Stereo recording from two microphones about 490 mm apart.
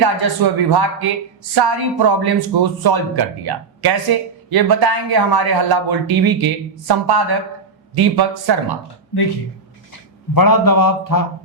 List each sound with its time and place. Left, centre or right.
0.0 s speech: right
10.3 s a man's voice: left